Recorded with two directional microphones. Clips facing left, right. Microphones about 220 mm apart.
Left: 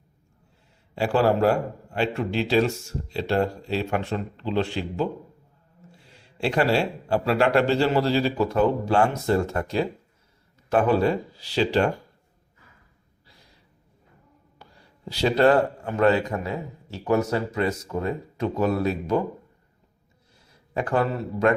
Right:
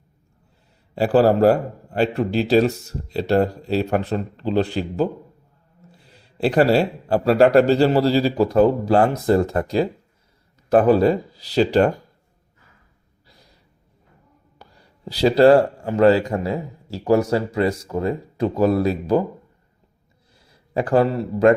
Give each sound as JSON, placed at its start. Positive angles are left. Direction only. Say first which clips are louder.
{"t": 0.9, "sound": "a man's voice", "louder": "right 5 dB", "side_deg": -40}
{"t": 6.3, "sound": "a man's voice", "louder": "right 6 dB", "side_deg": -40}
{"t": 14.6, "sound": "a man's voice", "louder": "right 3 dB", "side_deg": -35}
{"t": 20.7, "sound": "a man's voice", "louder": "right 6 dB", "side_deg": -35}